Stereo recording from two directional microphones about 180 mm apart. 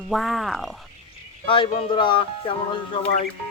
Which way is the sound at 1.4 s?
30° left (ahead or behind).